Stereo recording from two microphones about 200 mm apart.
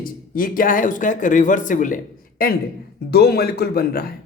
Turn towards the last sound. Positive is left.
turn(degrees=50)  # may be behind; listen again after turning